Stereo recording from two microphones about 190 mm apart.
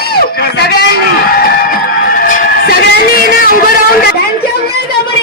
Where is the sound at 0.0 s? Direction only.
55° left (ahead or behind).